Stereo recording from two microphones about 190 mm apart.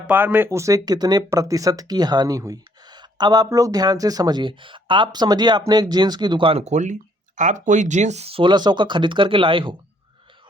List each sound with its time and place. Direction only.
0.1 s speech: 10° right (ahead or behind); by 9.7 s 25° right (ahead or behind)